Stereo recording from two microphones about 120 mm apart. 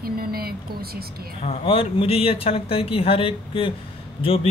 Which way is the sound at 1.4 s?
50° left (ahead or behind).